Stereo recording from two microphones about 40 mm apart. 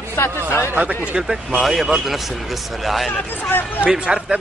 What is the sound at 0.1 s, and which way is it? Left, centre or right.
Speech, left.